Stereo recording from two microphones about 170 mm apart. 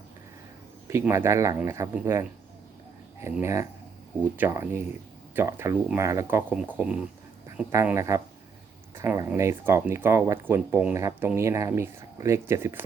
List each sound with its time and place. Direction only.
0.9 s speech: 15° right (ahead or behind)
3.4 s speech: 15° right (ahead or behind)